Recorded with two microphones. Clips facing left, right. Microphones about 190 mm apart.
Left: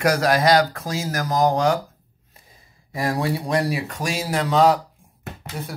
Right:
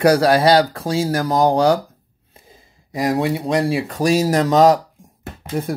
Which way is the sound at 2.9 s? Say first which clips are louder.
Right 4 dB; 20° right (ahead or behind).